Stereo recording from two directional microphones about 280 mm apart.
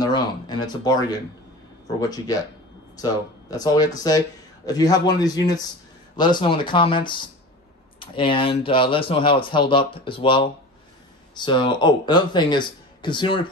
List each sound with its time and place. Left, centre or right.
0.0 s speech: centre